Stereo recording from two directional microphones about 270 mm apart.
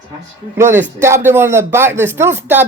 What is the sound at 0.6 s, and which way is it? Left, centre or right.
Speech, centre.